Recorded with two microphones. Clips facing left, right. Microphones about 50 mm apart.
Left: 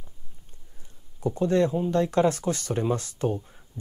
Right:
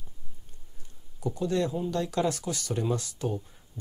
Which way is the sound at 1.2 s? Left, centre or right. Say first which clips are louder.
Left 5 dB; left.